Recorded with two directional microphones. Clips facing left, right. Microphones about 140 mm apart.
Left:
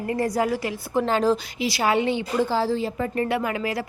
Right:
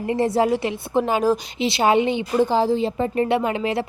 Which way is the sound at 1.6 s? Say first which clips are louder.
Right 6 dB; 25° right (ahead or behind).